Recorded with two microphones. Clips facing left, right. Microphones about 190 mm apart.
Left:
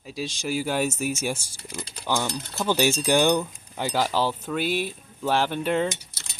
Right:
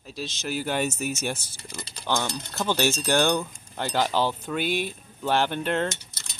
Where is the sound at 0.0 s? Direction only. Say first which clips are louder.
Left 3 dB; 10° left (ahead or behind).